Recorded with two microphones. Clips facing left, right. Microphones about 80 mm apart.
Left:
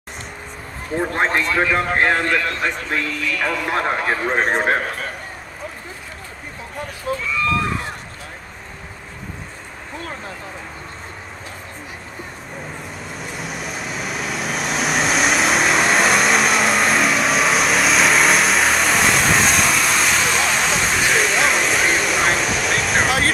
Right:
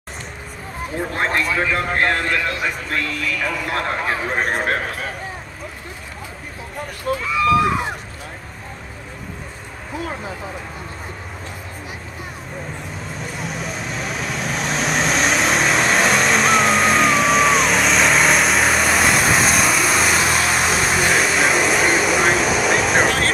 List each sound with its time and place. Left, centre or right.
0.9 s speech: centre
1.4 s a man's voice: centre
2.0 s speech: centre
2.2 s a man's voice: centre
3.7 s speech: centre
4.0 s a man's voice: centre
7.1 s a man's voice: centre
7.4 s speech: centre
9.9 s speech: centre
13.0 s vehicle: centre